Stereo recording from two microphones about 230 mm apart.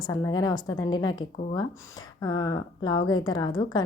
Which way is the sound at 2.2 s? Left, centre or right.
Centre.